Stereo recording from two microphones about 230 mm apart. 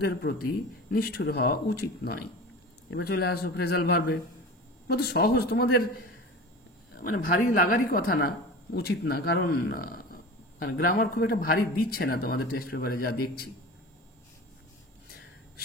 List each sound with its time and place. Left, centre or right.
0.0 s a man's voice: left
7.0 s a man's voice: left